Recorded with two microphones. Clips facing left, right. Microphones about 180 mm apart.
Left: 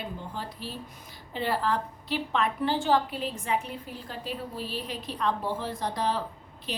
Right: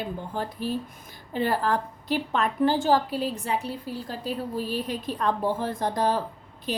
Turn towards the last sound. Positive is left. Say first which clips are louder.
# right 6 dB
turn(degrees=-45)  # may be behind; listen again after turning